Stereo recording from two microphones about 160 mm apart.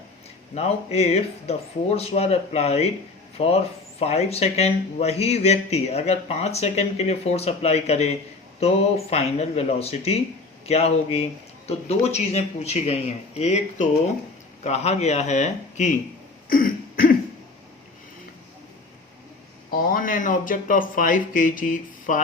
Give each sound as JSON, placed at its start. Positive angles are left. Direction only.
{"t": 0.5, "sound": "a man's voice", "side_deg": 40}
{"t": 16.5, "sound": "throat clearing", "side_deg": 60}
{"t": 19.7, "sound": "speech", "side_deg": 65}